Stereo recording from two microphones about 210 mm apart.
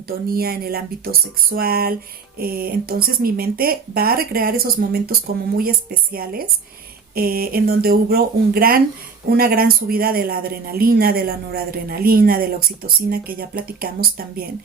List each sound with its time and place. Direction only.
0.3 s speech: 45° right (ahead or behind)